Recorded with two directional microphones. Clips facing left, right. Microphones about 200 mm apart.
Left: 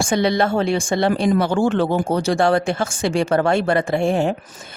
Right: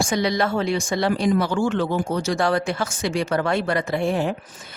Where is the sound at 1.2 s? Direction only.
60° left (ahead or behind).